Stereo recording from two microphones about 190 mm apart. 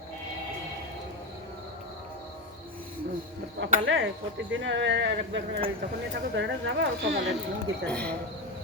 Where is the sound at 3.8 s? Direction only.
75° right (ahead or behind).